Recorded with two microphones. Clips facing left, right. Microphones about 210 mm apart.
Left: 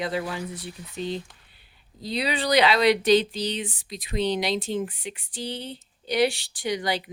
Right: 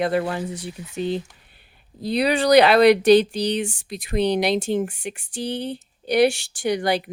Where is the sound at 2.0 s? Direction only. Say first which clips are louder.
Right 7 dB; 50° right (ahead or behind); by 4.9 s 75° right (ahead or behind).